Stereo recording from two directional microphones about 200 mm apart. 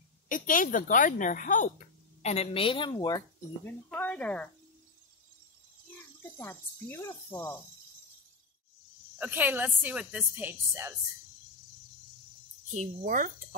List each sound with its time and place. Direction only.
0.3 s a woman's voice: 40° left (ahead or behind); by 3.3 s 20° left (ahead or behind)
3.9 s speech: 5° left (ahead or behind)
6.3 s speech: 10° left (ahead or behind)
9.2 s a woman's voice: 10° right (ahead or behind)
12.7 s speech: 40° right (ahead or behind)